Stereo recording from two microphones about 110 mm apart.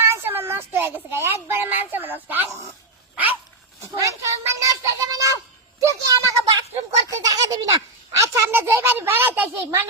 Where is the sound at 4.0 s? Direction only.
30° right (ahead or behind).